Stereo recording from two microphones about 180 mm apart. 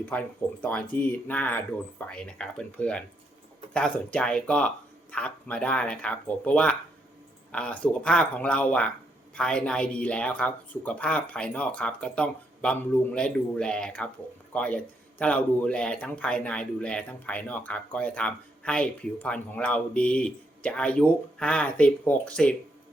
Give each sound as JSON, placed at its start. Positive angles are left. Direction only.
{"t": 0.0, "sound": "speech", "side_deg": 10}